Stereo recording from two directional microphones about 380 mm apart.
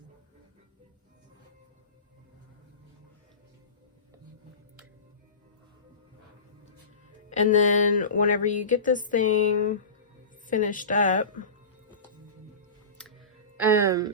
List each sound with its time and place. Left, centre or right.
7.3 s speech: centre
13.0 s music: centre